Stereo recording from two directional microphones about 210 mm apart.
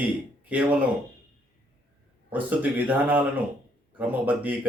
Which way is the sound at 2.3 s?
10° right (ahead or behind).